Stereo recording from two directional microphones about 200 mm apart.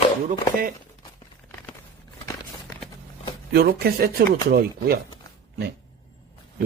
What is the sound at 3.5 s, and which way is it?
Speech, 50° right (ahead or behind).